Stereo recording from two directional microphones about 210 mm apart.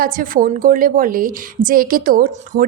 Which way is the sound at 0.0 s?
40° right (ahead or behind).